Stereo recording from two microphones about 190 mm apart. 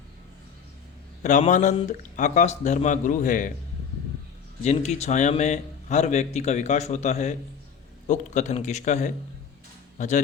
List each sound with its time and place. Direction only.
1.2 s a man's voice: 40° left (ahead or behind)
4.6 s a man's voice: 35° left (ahead or behind)